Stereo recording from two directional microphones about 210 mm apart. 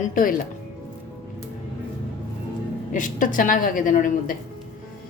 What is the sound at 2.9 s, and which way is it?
A woman's voice, 40° left (ahead or behind).